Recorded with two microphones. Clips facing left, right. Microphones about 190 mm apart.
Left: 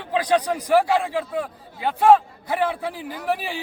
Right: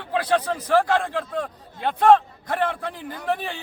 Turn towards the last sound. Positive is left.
turn(degrees=5)  # may be behind; listen again after turning